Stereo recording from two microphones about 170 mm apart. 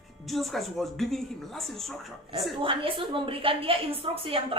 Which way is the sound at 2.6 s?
30° right (ahead or behind).